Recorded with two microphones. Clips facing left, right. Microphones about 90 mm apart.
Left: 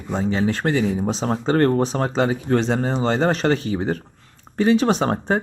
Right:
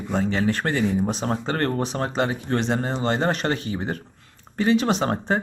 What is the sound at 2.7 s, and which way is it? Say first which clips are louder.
Speech: left 3 dB; 10° left (ahead or behind).